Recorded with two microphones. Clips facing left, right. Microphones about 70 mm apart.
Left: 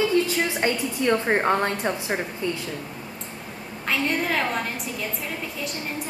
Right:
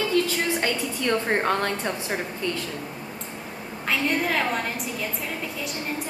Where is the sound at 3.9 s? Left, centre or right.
Centre.